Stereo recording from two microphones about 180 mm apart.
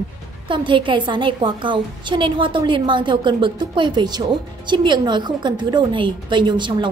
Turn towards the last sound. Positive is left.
turn(degrees=-25)  # may be behind; listen again after turning